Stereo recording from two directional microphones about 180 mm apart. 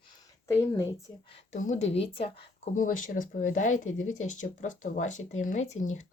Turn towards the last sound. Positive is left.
turn(degrees=40)  # may be behind; listen again after turning